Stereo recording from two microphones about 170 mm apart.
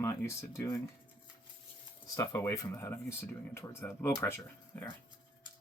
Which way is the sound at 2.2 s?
20° left (ahead or behind).